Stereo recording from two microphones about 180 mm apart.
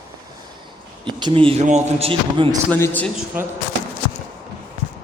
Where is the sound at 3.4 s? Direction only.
10° right (ahead or behind).